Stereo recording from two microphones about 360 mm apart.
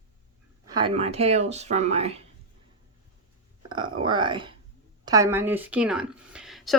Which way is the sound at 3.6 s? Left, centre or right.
Centre.